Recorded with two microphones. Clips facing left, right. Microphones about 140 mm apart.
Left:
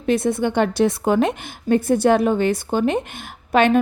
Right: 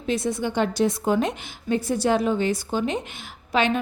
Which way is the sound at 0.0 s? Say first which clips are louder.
Left 6 dB; 55° left (ahead or behind).